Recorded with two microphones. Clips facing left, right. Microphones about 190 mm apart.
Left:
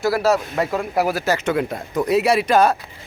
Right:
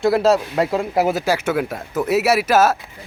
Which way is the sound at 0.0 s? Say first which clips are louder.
Right 3 dB; 20° right (ahead or behind).